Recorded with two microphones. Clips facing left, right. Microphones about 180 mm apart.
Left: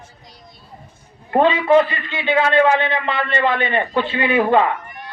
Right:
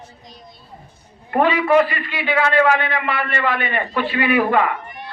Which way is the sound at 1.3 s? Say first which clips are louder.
Left 2 dB; 25° left (ahead or behind).